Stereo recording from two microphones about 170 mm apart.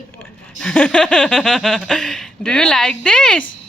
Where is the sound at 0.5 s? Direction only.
5° left (ahead or behind).